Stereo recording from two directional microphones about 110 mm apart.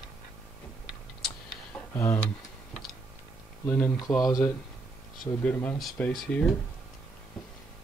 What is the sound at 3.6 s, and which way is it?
Speech, 15° left (ahead or behind).